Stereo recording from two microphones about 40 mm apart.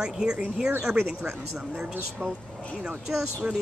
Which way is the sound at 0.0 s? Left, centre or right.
Centre.